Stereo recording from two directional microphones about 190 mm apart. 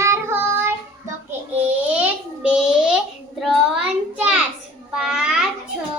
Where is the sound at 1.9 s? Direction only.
5° right (ahead or behind).